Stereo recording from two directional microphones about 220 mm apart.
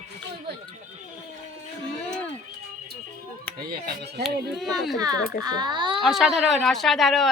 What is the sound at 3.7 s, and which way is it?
Speech, 50° right (ahead or behind).